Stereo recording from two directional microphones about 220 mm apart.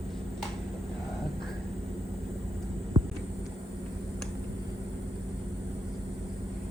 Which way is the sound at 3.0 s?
25° right (ahead or behind).